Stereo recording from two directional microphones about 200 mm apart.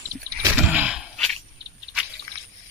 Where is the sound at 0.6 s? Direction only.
5° right (ahead or behind).